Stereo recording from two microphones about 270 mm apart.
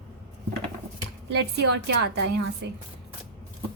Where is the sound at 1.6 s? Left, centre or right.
Right.